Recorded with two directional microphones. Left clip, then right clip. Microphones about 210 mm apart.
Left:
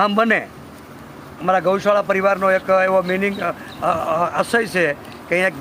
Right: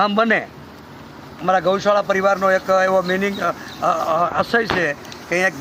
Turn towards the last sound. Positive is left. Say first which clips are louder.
# even
turn(degrees=25)  # may be behind; listen again after turning